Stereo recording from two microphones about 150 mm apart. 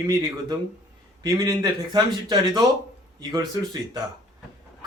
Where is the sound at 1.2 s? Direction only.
25° right (ahead or behind).